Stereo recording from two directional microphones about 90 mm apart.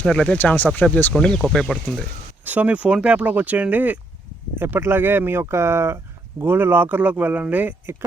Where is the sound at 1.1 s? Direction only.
5° left (ahead or behind).